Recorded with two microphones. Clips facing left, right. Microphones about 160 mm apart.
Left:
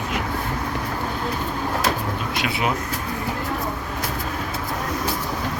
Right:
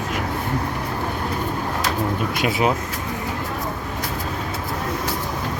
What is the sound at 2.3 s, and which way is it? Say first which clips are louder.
Speech: right 4 dB; 40° right (ahead or behind).